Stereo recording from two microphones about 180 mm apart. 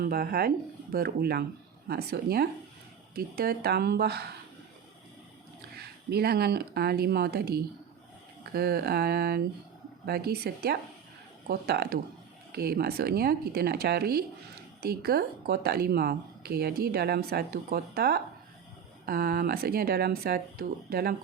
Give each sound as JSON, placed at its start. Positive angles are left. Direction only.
{"t": 0.0, "sound": "speech", "side_deg": -55}
{"t": 5.7, "sound": "speech", "side_deg": -60}